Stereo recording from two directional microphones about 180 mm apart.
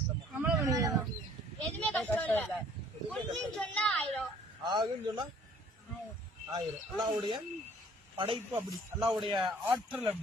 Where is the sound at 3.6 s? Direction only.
5° left (ahead or behind).